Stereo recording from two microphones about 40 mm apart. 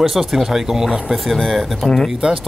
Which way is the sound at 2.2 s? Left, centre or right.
Right.